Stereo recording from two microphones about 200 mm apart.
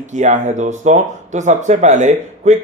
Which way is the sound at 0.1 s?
35° right (ahead or behind).